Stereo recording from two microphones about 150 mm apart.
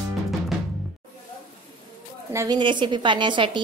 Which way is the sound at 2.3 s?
20° right (ahead or behind).